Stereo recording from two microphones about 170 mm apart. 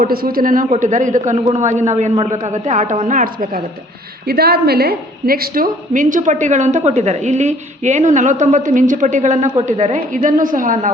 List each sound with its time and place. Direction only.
0.0 s a woman's voice: 60° right (ahead or behind)
4.3 s a woman's voice: 65° right (ahead or behind); by 10.9 s 50° right (ahead or behind)